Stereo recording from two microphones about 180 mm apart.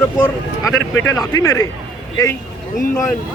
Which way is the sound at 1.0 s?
20° left (ahead or behind).